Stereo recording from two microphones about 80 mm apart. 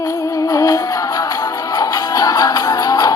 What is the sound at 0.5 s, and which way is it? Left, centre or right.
Music, left.